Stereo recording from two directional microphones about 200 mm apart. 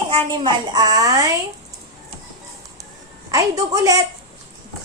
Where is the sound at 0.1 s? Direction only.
20° right (ahead or behind).